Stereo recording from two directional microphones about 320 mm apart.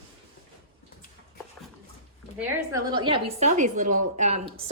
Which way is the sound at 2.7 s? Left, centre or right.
Centre.